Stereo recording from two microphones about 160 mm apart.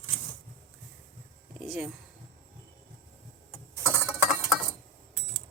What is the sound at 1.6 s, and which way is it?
Speech, centre (ahead or behind).